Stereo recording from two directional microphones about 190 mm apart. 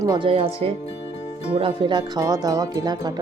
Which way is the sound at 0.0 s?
20° right (ahead or behind).